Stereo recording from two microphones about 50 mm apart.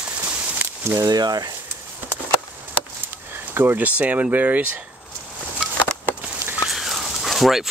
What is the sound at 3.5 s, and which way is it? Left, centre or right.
Speech, right.